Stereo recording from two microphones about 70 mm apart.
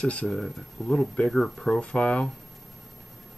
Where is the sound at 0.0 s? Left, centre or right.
Centre.